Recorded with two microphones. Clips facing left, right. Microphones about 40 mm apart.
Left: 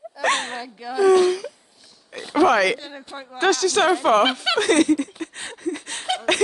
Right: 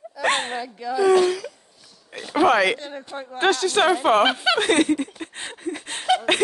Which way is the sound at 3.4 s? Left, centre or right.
Right.